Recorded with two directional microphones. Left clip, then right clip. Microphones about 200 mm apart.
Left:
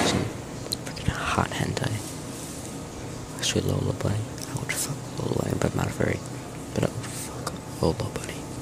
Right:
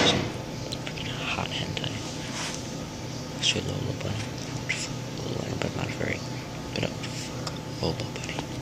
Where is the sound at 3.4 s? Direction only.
40° left (ahead or behind).